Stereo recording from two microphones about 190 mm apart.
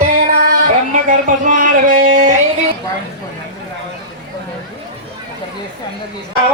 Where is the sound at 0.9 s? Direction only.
45° right (ahead or behind).